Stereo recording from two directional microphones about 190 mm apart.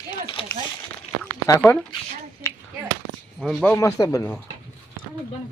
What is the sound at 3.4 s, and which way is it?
Speech, 5° left (ahead or behind).